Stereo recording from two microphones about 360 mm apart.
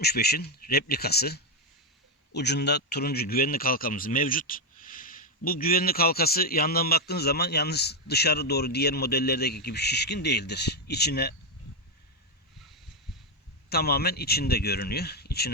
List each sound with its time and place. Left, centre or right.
0.0 s speech: left
13.7 s speech: left